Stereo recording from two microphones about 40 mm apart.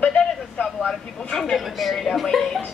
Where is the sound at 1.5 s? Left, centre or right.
Centre.